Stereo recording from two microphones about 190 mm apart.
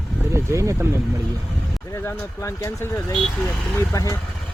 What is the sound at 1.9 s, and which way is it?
Speech, 15° left (ahead or behind).